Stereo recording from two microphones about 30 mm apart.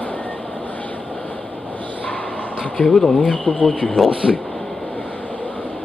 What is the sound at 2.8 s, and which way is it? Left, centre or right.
Speech, centre.